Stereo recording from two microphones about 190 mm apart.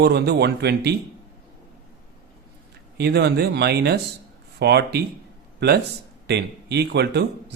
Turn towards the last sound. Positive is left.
turn(degrees=-60)  # may be behind; listen again after turning